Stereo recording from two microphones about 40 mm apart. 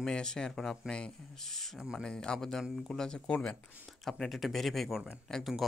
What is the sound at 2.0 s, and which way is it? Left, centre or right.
Speech, centre.